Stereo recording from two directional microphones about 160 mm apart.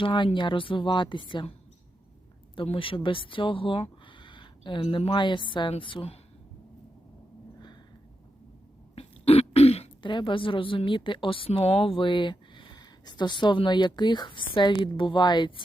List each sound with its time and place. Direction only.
0.0 s speech: 30° left (ahead or behind)
2.6 s speech: 35° left (ahead or behind)
9.0 s speech: 40° left (ahead or behind)